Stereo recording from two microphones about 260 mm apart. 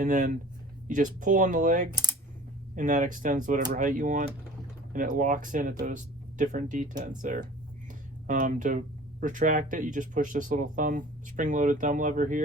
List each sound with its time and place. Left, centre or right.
0.0 s speech: right